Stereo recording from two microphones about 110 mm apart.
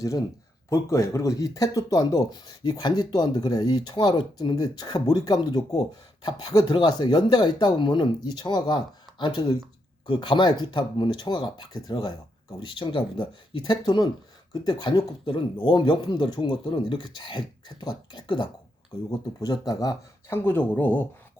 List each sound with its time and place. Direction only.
0.7 s speech: 25° left (ahead or behind)
20.2 s speech: 20° left (ahead or behind)